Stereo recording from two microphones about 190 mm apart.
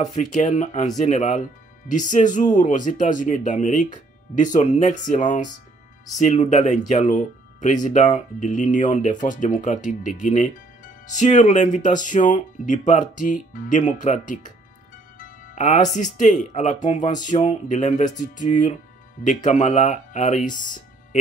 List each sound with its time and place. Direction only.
0.0 s speech: 40° left (ahead or behind)